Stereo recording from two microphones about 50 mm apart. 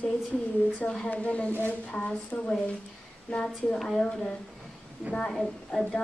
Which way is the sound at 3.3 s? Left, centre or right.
Left.